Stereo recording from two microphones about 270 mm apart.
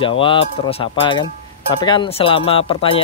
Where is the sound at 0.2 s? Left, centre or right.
Centre.